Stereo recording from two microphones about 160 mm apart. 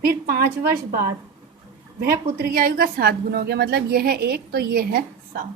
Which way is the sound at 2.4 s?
65° right (ahead or behind).